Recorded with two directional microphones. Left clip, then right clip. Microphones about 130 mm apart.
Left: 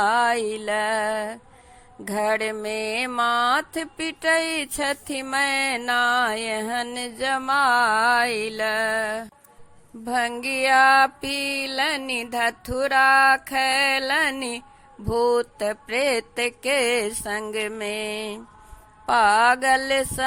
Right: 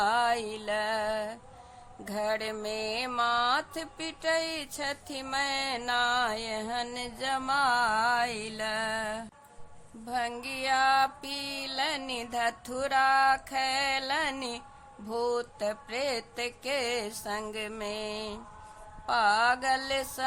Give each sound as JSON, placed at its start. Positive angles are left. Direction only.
{"t": 0.0, "sound": "music", "side_deg": 35}